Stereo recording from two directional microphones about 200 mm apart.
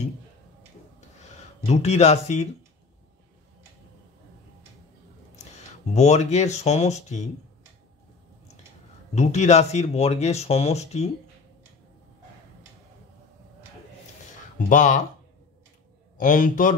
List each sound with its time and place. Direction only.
1.7 s speech: 35° left (ahead or behind)
5.9 s speech: 35° left (ahead or behind)
9.1 s speech: 35° left (ahead or behind)
14.7 s speech: 40° left (ahead or behind)
16.2 s speech: 40° left (ahead or behind)